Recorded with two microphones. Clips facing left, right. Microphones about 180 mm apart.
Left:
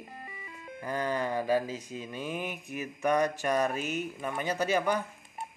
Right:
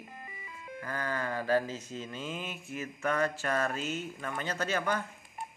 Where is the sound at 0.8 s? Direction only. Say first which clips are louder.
Left 4 dB; 15° left (ahead or behind).